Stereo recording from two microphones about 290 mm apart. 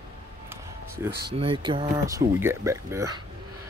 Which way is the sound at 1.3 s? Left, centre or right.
Centre.